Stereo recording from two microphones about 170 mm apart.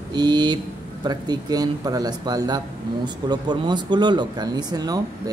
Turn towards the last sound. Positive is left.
turn(degrees=-20)  # may be behind; listen again after turning